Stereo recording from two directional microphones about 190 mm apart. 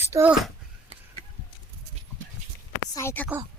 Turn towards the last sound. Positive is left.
turn(degrees=10)  # may be behind; listen again after turning